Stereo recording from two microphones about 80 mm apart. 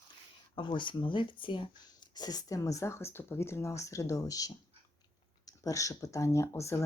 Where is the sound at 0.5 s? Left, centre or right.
Left.